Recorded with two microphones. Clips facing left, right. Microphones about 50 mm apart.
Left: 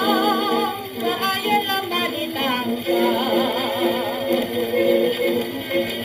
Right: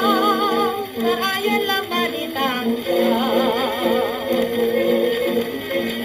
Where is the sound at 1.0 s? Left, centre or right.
Centre.